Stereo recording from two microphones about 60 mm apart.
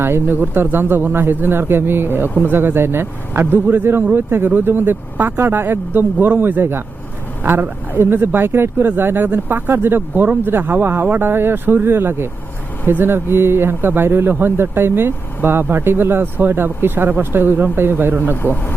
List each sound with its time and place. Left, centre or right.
0.0 s speech: right
18.4 s speech: left